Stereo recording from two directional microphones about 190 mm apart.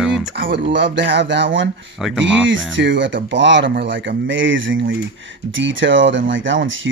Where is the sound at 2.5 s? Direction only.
75° right (ahead or behind).